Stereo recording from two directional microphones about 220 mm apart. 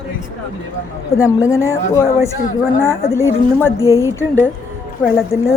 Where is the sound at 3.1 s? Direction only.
10° left (ahead or behind).